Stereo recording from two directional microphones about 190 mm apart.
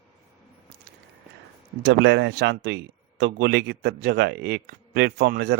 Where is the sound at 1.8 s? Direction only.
65° right (ahead or behind).